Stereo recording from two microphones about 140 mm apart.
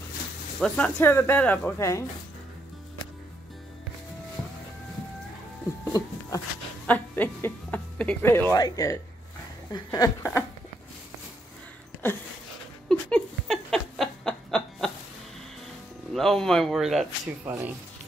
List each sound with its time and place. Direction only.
0.6 s speech: 5° left (ahead or behind)
5.9 s a sound: 25° left (ahead or behind)
6.9 s speech: 10° left (ahead or behind)
8.5 s speech: 25° left (ahead or behind)
12.8 s a sound: 5° left (ahead or behind)
16.1 s speech: 5° left (ahead or behind)
17.5 s speech: 10° right (ahead or behind)